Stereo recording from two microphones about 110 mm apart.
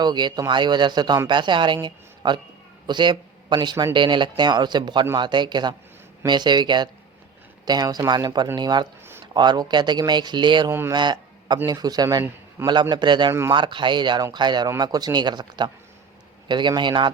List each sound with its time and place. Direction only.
0.0 s a man's voice: 40° right (ahead or behind)
10.7 s speech: 20° right (ahead or behind)
10.9 s a man's voice: 40° right (ahead or behind)